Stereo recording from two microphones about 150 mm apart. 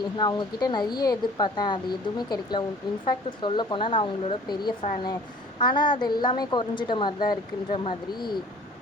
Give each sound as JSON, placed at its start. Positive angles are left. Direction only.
{"t": 0.2, "sound": "speech", "side_deg": 30}